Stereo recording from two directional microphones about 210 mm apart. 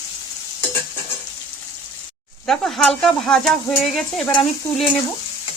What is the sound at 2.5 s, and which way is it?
Speech, centre (ahead or behind).